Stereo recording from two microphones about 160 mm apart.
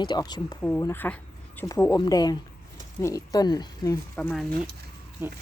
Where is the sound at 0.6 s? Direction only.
15° left (ahead or behind).